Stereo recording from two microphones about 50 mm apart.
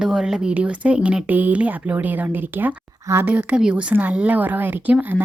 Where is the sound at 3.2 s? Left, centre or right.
Right.